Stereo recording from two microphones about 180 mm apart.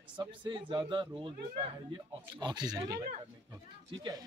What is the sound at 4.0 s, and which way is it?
Speech, 20° right (ahead or behind).